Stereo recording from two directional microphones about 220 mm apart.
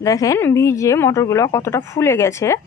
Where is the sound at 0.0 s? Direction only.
15° left (ahead or behind).